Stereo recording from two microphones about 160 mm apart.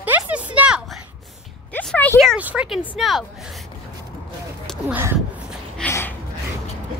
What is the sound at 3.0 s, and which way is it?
Speech, centre (ahead or behind).